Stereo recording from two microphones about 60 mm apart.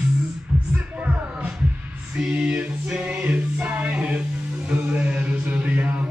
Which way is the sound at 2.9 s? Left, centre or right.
Centre.